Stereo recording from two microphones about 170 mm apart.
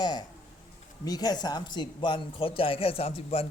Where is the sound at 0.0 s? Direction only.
25° left (ahead or behind).